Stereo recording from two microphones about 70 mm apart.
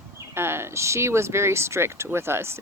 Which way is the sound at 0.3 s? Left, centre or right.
Right.